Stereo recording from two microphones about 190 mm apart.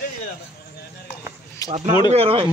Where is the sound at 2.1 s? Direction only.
30° right (ahead or behind).